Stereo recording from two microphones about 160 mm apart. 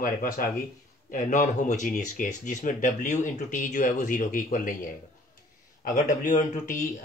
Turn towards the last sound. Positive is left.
turn(degrees=50)  # may be behind; listen again after turning